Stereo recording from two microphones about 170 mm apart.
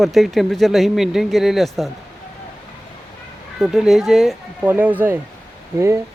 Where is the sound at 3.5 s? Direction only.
5° right (ahead or behind).